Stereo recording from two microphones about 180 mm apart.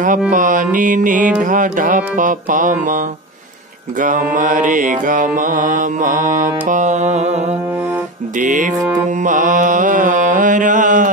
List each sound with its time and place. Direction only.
0.3 s mantra: 45° right (ahead or behind)
4.0 s mantra: 45° right (ahead or behind)